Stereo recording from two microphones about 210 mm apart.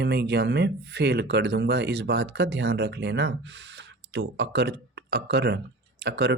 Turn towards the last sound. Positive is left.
turn(degrees=-55)  # may be behind; listen again after turning